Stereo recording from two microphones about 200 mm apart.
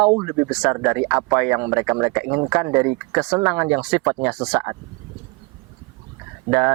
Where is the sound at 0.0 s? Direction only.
20° right (ahead or behind).